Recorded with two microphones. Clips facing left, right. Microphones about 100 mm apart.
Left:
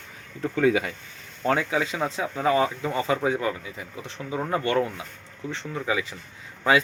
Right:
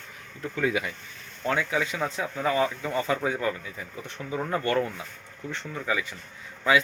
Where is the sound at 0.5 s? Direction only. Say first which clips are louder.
Left 5 dB; 30° left (ahead or behind).